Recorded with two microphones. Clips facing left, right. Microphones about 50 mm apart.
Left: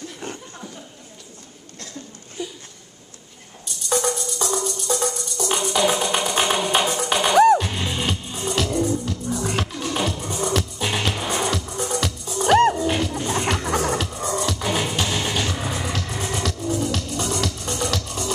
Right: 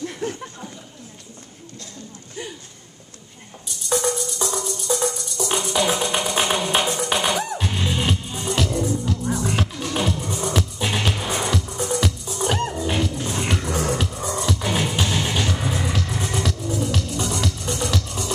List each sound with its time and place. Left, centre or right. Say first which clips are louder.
3.9 s music: even; centre
12.4 s music: left 9 dB; left
12.7 s music: left 1 dB; centre